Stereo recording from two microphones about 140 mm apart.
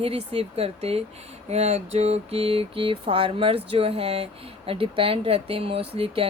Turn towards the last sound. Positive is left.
turn(degrees=-40)  # may be behind; listen again after turning